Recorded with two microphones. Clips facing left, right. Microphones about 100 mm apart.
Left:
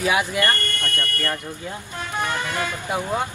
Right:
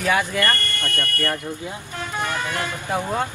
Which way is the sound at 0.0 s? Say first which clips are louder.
Even; 15° left (ahead or behind).